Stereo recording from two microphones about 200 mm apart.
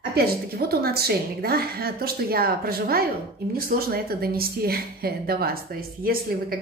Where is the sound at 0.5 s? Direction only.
50° right (ahead or behind).